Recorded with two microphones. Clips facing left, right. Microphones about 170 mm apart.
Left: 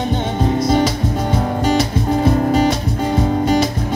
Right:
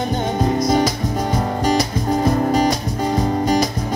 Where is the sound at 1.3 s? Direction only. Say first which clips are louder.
Left 2 dB; 40° right (ahead or behind).